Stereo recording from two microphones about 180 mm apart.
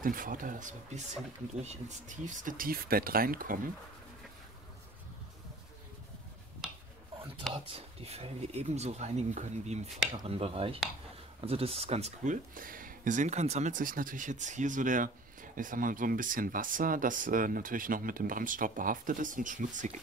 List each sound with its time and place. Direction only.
0.0 s speech: 50° right (ahead or behind)
7.5 s speech: 35° right (ahead or behind)